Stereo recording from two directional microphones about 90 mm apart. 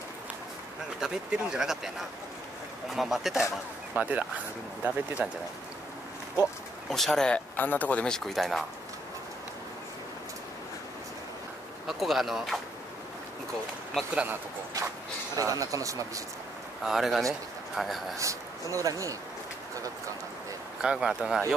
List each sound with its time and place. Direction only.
1.0 s speech: 10° right (ahead or behind)
3.9 s speech: 15° right (ahead or behind)
6.9 s speech: 5° left (ahead or behind)
7.5 s speech: 20° left (ahead or behind); by 8.6 s centre (ahead or behind)
11.9 s speech: centre (ahead or behind)
15.3 s speech: 40° right (ahead or behind)
16.8 s a man's voice: 5° right (ahead or behind)
18.1 s speech: 35° right (ahead or behind)
20.8 s speech: 5° right (ahead or behind)